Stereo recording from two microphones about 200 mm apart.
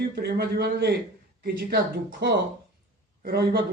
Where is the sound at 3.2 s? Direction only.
50° right (ahead or behind).